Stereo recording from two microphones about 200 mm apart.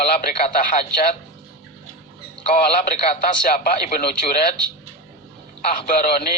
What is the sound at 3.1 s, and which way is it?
A man's voice, 40° left (ahead or behind).